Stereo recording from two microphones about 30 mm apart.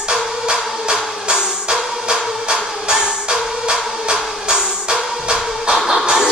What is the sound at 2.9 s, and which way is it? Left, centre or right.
Music, right.